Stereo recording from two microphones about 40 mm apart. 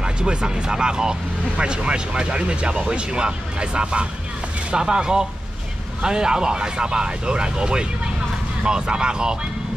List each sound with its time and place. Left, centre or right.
0.0 s speech: right